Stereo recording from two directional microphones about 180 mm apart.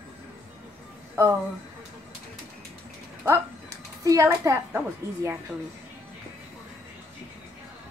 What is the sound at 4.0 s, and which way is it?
A woman's voice, 15° right (ahead or behind).